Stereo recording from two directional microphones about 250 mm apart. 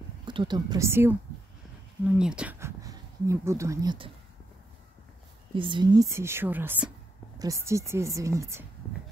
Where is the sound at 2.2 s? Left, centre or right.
Centre.